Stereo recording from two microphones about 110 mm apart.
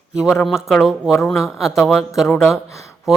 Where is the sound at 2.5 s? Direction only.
25° left (ahead or behind).